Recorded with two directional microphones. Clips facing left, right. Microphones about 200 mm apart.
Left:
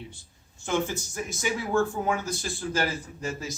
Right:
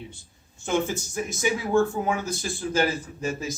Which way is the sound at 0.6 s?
20° right (ahead or behind).